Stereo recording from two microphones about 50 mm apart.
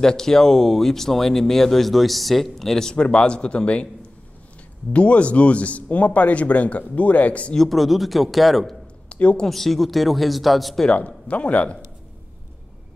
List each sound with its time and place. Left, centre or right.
0.0 s speech: centre
4.9 s speech: left
7.5 s speech: centre
9.1 s a woman's voice: left
9.5 s speech: centre
10.9 s speech: left